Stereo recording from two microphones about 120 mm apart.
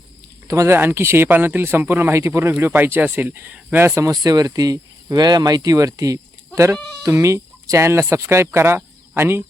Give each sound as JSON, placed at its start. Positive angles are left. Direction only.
{"t": 0.4, "sound": "speech", "side_deg": -25}